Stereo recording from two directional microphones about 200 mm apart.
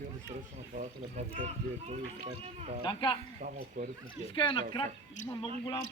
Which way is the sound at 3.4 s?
45° right (ahead or behind).